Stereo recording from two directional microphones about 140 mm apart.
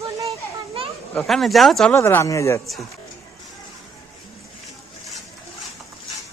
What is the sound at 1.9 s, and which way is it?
Speech, 20° left (ahead or behind).